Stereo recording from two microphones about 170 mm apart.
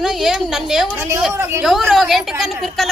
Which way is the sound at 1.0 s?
15° right (ahead or behind).